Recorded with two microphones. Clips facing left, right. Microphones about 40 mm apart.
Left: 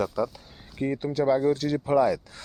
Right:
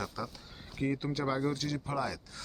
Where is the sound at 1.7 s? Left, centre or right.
Left.